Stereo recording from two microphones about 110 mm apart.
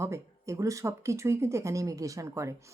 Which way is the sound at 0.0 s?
25° right (ahead or behind).